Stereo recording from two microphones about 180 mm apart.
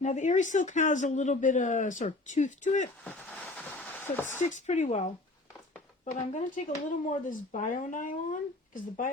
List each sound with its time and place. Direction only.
0.0 s speech: 40° left (ahead or behind)
3.0 s a sound: 5° left (ahead or behind)
4.4 s speech: 40° left (ahead or behind)